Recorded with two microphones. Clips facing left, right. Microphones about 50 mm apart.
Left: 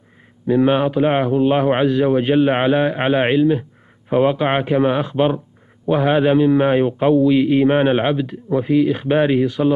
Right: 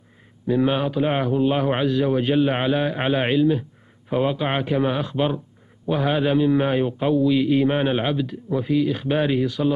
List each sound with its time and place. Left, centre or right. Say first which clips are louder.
0.5 s a man's voice: left 5 dB; left